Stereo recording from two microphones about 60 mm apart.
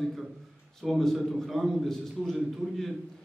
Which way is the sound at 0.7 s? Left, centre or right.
Centre.